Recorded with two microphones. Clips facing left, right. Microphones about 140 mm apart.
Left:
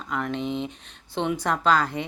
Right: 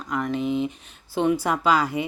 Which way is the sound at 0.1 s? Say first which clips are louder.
Right 3 dB; centre (ahead or behind).